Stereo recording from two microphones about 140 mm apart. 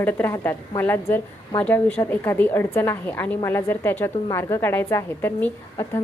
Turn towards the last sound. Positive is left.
turn(degrees=20)  # may be behind; listen again after turning